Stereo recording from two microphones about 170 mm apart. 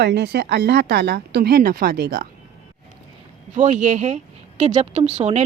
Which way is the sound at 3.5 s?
45° right (ahead or behind).